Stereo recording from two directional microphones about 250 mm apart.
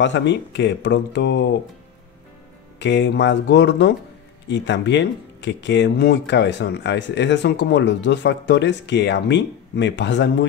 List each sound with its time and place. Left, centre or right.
0.0 s speech: left
2.8 s speech: left